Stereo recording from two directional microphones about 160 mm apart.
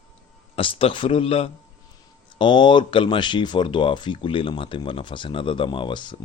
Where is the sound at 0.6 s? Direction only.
35° left (ahead or behind).